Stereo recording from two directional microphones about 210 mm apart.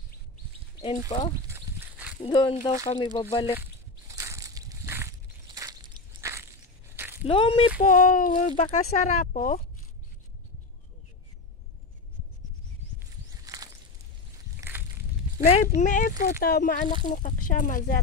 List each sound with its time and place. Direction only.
1.1 s speech: 30° left (ahead or behind)
1.5 s livestock: 10° right (ahead or behind)
2.1 s speech: 25° left (ahead or behind)
4.1 s crushing: 15° right (ahead or behind)
7.2 s speech: 25° left (ahead or behind)
7.7 s speech: 40° left (ahead or behind)
13.4 s a sound: 15° right (ahead or behind)
15.3 s speech: 35° left (ahead or behind)